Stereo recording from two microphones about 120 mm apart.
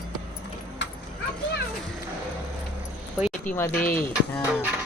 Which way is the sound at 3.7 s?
15° left (ahead or behind).